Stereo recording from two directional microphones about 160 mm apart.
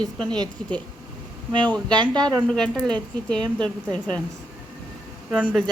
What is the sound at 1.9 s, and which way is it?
Speech, 25° right (ahead or behind).